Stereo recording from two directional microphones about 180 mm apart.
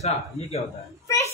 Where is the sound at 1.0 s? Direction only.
15° left (ahead or behind).